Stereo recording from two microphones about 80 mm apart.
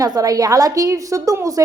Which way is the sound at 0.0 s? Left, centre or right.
Right.